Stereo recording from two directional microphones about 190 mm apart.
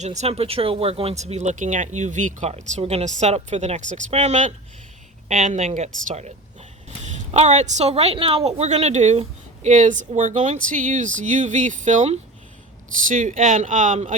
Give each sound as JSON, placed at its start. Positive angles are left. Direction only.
{"t": 0.0, "sound": "speech", "side_deg": -35}